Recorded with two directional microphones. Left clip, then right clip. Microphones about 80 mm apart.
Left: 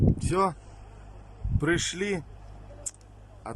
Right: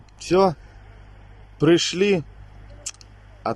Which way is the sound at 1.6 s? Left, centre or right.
Right.